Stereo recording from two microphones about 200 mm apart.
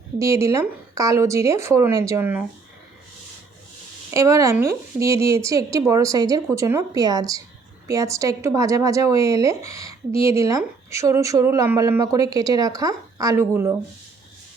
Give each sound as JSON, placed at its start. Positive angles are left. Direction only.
{"t": 0.2, "sound": "a woman's voice", "side_deg": -15}
{"t": 4.1, "sound": "a woman's voice", "side_deg": -15}